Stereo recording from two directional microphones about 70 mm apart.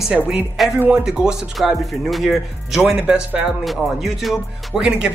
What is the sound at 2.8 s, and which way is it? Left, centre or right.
Speech, centre.